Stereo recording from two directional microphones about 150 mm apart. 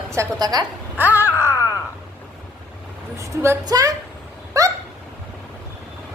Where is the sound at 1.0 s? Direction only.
10° right (ahead or behind).